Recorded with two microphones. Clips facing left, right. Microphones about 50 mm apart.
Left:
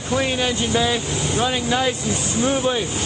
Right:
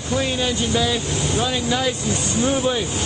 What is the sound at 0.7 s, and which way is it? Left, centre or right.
Speech, left.